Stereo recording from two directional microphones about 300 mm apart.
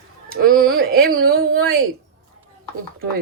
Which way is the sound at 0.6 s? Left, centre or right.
Right.